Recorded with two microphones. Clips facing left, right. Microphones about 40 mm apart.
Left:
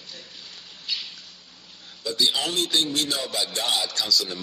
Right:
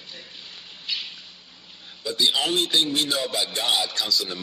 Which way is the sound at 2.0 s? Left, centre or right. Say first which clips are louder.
Right 1 dB; centre.